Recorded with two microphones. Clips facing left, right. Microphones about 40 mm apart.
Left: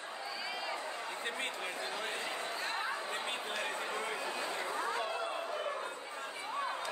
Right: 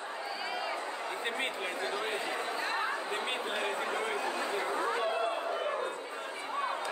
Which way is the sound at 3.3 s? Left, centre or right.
Right.